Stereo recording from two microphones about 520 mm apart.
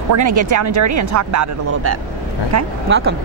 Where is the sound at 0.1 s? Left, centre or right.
Right.